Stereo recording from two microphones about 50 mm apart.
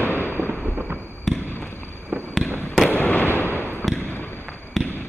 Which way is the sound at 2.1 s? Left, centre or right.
Right.